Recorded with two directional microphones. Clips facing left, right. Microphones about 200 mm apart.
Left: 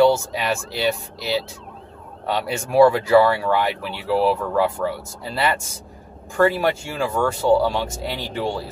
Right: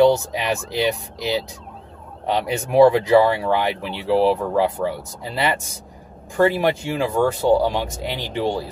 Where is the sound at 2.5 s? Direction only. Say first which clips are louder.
Right 1 dB; 20° right (ahead or behind).